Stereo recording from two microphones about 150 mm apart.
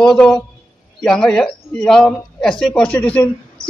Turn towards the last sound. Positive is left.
turn(degrees=10)  # may be behind; listen again after turning